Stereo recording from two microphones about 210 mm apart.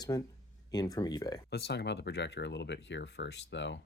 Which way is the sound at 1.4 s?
50° left (ahead or behind).